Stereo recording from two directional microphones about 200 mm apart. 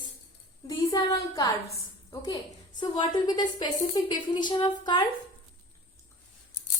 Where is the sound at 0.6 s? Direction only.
20° left (ahead or behind).